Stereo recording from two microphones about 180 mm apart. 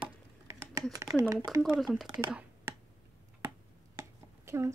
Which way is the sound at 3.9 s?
15° right (ahead or behind).